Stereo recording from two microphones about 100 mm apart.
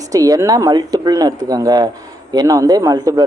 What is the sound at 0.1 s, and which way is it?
Speech, 35° right (ahead or behind).